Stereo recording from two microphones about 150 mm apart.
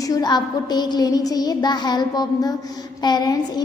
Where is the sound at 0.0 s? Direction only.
25° left (ahead or behind).